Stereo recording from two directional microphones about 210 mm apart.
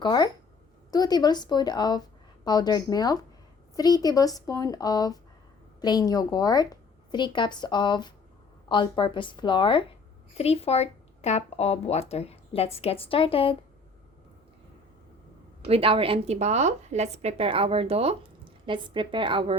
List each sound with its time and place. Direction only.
0.0 s speech: 20° left (ahead or behind)
15.6 s a woman's voice: 25° right (ahead or behind)